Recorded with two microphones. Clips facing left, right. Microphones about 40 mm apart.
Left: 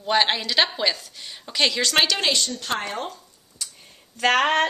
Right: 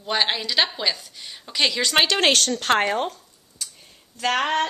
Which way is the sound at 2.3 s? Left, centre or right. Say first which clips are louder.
Right 5 dB; right.